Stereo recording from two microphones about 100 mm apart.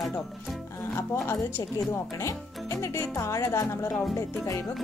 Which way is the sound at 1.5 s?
25° left (ahead or behind).